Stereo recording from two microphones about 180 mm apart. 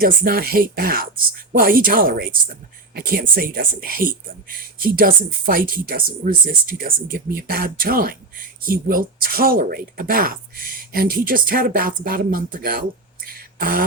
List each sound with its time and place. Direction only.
0.0 s speech: 55° right (ahead or behind)
13.2 s beatboxing: 55° right (ahead or behind)